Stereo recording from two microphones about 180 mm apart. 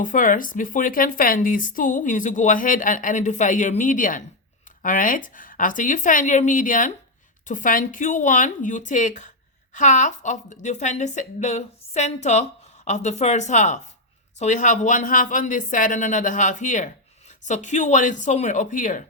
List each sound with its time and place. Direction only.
0.0 s a woman's voice: 45° left (ahead or behind)